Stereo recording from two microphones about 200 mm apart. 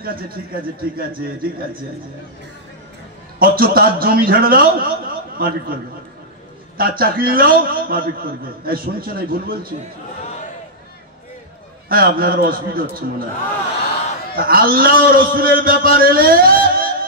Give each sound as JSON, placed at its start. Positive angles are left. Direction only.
{"t": 0.0, "sound": "a man's voice", "side_deg": -45}
{"t": 3.3, "sound": "a man's voice", "side_deg": -50}
{"t": 6.8, "sound": "a man's voice", "side_deg": -50}
{"t": 11.9, "sound": "a man's voice", "side_deg": -45}
{"t": 14.3, "sound": "a man's voice", "side_deg": -45}